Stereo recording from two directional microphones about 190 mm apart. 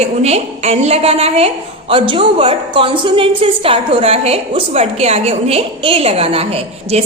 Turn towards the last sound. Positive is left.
turn(degrees=-30)  # may be behind; listen again after turning